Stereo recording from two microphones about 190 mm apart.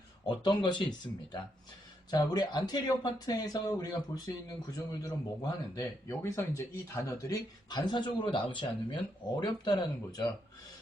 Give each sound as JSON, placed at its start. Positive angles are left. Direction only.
{"t": 0.4, "sound": "speech", "side_deg": 25}